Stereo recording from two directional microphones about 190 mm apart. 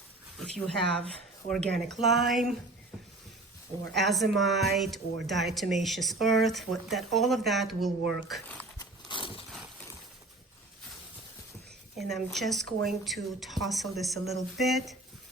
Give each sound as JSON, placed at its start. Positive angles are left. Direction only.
{"t": 0.3, "sound": "speech", "side_deg": 0}
{"t": 3.9, "sound": "speech", "side_deg": 0}
{"t": 8.8, "sound": "a sound", "side_deg": 25}
{"t": 11.9, "sound": "speech", "side_deg": 0}